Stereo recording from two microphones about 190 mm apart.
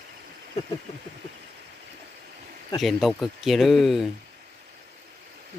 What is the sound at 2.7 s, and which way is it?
Speech, centre (ahead or behind).